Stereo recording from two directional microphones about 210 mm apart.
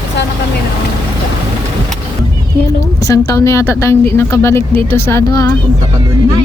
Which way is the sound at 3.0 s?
15° left (ahead or behind).